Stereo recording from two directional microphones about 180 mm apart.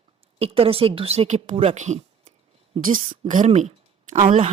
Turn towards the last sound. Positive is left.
turn(degrees=-30)  # may be behind; listen again after turning